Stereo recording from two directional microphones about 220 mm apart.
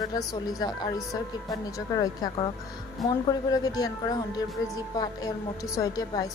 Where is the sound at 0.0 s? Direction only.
15° left (ahead or behind).